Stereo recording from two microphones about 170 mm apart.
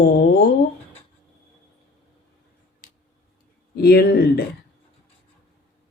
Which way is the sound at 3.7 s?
70° left (ahead or behind).